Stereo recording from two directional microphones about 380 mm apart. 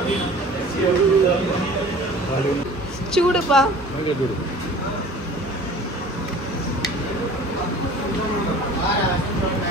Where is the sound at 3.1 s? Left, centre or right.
Centre.